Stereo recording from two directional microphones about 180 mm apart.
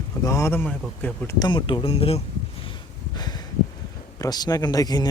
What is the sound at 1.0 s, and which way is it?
Speech, 10° left (ahead or behind).